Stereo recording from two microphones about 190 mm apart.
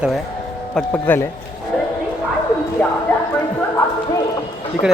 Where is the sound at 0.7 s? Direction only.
5° left (ahead or behind).